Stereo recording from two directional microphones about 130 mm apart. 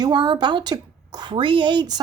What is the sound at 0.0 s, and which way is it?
Speech, 35° right (ahead or behind).